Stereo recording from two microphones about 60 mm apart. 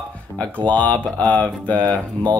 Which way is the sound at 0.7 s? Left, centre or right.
Left.